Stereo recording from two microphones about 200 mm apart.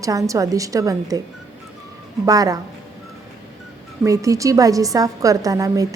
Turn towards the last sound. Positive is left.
turn(degrees=-15)  # may be behind; listen again after turning